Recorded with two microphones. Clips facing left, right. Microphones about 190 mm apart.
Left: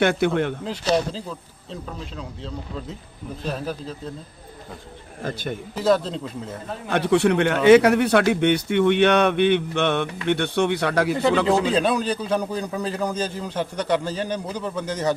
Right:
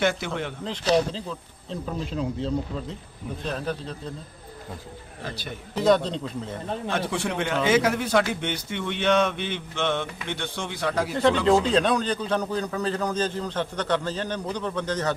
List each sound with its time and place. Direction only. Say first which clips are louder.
0.0 s speech: left 6 dB; 60° left (ahead or behind)
0.6 s a man's voice: even; 5° left (ahead or behind)
5.2 s a man's voice: left 7 dB; 50° left (ahead or behind)
5.7 s speech: even; 5° left (ahead or behind)
6.9 s speech: left 11 dB; 65° left (ahead or behind)
11.4 s a man's voice: even; 5° left (ahead or behind)